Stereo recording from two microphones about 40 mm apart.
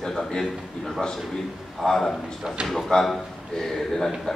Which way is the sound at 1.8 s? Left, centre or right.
Centre.